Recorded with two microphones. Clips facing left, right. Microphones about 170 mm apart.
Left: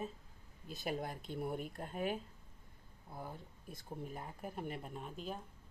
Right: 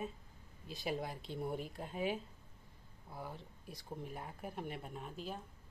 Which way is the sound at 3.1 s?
5° right (ahead or behind).